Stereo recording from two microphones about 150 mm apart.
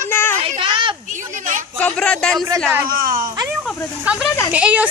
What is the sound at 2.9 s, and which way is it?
Speech, 70° right (ahead or behind).